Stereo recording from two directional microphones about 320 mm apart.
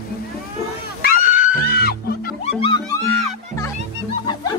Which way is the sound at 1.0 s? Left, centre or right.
Left.